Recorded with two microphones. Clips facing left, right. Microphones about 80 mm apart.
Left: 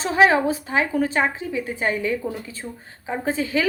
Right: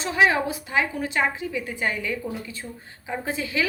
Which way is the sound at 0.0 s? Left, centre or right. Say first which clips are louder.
Left 4 dB; left.